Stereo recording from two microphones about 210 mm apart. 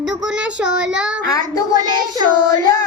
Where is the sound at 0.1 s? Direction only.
5° right (ahead or behind).